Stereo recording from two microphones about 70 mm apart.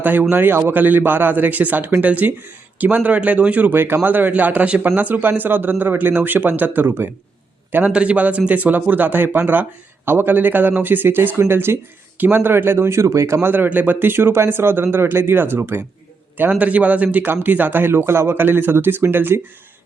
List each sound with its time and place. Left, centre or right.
0.0 s a man's voice: right
7.9 s a man's voice: centre; by 15.8 s right
16.4 s a man's voice: right